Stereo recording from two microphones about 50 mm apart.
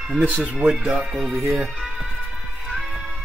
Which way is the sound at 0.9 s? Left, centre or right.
Centre.